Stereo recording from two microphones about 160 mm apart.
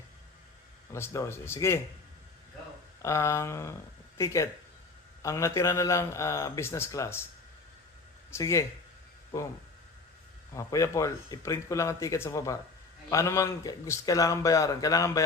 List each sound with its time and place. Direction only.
0.9 s a man's voice: 15° left (ahead or behind)
3.0 s a man's voice: 20° left (ahead or behind)
8.3 s a man's voice: 20° left (ahead or behind)
10.5 s a man's voice: 20° left (ahead or behind)